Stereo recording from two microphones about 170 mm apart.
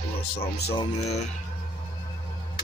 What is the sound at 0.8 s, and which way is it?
Speech, 40° left (ahead or behind).